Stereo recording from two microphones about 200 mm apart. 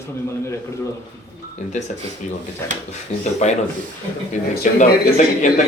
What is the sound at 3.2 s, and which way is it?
Speech, 35° left (ahead or behind).